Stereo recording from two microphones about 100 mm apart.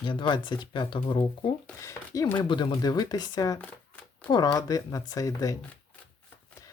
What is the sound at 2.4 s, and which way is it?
Speech, 50° left (ahead or behind).